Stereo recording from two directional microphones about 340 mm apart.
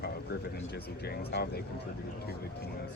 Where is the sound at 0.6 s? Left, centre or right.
Left.